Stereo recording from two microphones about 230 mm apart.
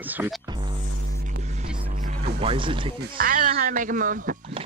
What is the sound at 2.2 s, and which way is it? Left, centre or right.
Speech, right.